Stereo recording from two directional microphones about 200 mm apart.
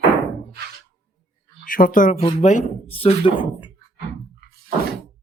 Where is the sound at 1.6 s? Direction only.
45° left (ahead or behind); by 3.3 s 25° left (ahead or behind).